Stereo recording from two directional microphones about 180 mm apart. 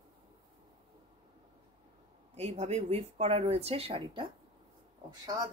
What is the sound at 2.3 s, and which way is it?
Speech, 35° right (ahead or behind).